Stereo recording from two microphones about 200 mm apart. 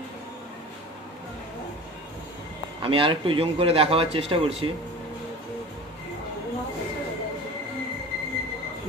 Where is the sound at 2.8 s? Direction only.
25° right (ahead or behind).